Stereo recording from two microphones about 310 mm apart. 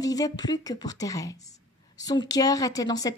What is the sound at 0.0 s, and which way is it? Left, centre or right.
A woman's voice, centre.